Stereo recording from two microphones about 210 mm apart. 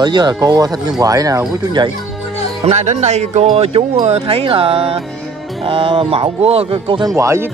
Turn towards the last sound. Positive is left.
turn(degrees=-15)  # may be behind; listen again after turning